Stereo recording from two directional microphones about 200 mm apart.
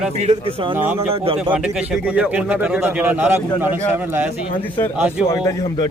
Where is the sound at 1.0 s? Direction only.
30° right (ahead or behind).